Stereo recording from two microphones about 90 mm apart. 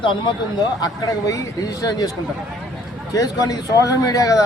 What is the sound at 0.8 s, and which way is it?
Speech, 45° left (ahead or behind).